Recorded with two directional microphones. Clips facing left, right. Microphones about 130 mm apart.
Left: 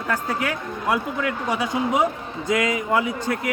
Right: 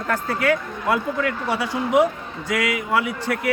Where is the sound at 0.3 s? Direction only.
15° left (ahead or behind).